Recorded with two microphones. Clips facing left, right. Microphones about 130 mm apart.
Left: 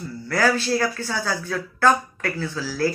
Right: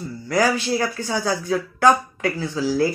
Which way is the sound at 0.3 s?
15° right (ahead or behind).